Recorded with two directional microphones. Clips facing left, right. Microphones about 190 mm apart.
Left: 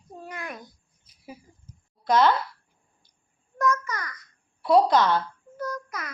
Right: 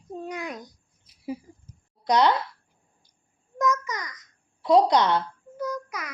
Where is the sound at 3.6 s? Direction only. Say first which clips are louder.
Even; 15° right (ahead or behind).